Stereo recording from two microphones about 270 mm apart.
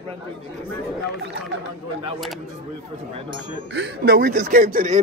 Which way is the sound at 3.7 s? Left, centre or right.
Right.